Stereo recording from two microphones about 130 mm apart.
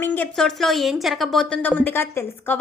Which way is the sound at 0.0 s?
15° left (ahead or behind).